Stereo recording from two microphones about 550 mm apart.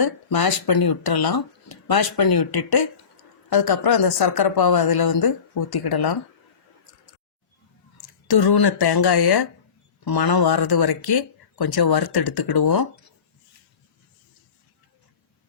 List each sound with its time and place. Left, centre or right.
0.0 s speech: left
8.3 s speech: left